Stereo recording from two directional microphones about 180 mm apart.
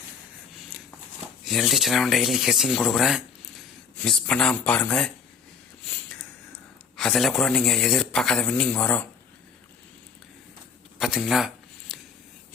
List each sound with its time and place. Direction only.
1.5 s a man's voice: centre (ahead or behind)
6.9 s a man's voice: centre (ahead or behind)
11.0 s a sound: centre (ahead or behind)